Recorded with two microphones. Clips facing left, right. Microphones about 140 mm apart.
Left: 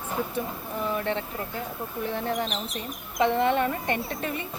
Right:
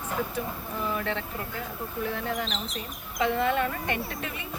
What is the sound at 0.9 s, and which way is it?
Speech, 25° left (ahead or behind).